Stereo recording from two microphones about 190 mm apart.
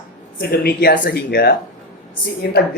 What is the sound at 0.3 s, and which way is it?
Speech, 55° left (ahead or behind).